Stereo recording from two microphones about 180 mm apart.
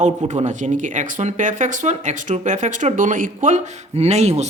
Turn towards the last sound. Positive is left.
turn(degrees=-40)  # may be behind; listen again after turning